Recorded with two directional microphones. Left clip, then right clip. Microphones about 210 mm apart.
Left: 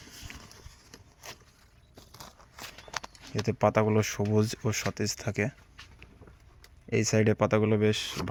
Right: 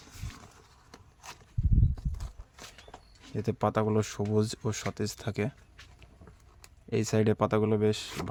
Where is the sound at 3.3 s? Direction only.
5° right (ahead or behind).